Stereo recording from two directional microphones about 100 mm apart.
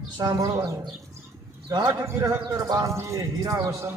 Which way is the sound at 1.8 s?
30° right (ahead or behind).